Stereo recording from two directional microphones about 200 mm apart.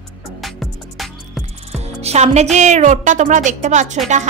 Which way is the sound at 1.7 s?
35° right (ahead or behind).